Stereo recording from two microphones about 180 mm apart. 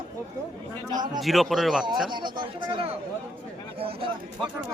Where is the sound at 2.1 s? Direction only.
25° right (ahead or behind).